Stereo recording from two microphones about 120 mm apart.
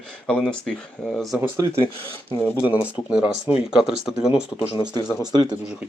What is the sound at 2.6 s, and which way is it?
Speech, 10° right (ahead or behind).